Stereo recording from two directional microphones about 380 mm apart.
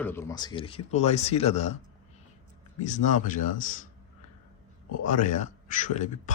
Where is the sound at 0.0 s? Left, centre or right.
Centre.